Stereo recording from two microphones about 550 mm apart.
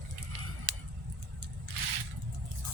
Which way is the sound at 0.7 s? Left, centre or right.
Right.